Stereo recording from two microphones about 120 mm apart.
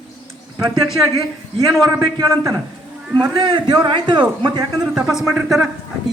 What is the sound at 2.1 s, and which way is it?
Speech, 30° right (ahead or behind).